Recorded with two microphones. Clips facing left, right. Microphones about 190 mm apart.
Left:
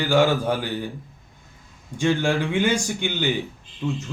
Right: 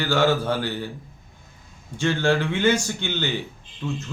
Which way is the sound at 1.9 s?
15° left (ahead or behind).